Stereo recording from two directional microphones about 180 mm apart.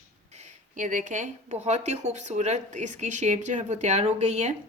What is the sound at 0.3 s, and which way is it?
A woman's voice, 45° right (ahead or behind).